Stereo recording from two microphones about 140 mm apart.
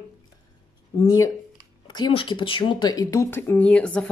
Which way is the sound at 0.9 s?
25° left (ahead or behind).